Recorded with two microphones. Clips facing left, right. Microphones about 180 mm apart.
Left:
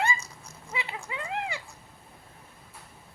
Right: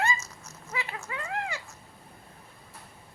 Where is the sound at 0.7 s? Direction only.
15° left (ahead or behind).